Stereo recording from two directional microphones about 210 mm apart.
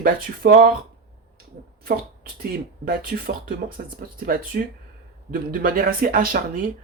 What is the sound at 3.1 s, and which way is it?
Speech, 40° right (ahead or behind).